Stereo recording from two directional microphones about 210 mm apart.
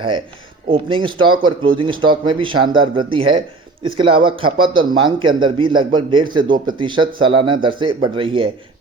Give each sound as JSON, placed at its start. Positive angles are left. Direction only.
{"t": 0.7, "sound": "speech", "side_deg": -25}